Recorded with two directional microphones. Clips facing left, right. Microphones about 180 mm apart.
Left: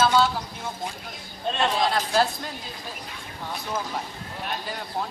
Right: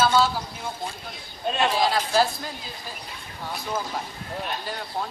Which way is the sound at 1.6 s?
5° right (ahead or behind).